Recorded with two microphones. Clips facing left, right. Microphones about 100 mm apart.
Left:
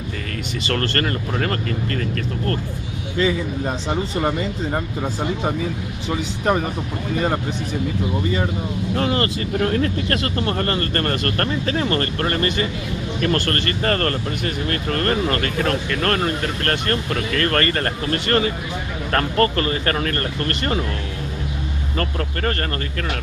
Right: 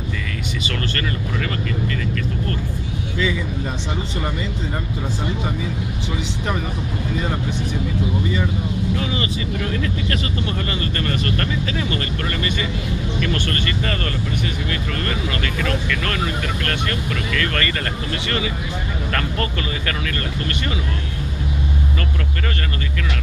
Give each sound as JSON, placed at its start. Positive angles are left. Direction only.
{"t": 0.7, "sound": "speech", "side_deg": 45}
{"t": 3.2, "sound": "speech", "side_deg": 40}
{"t": 8.9, "sound": "speech", "side_deg": 50}